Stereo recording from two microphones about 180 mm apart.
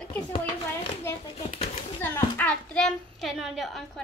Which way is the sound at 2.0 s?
10° left (ahead or behind).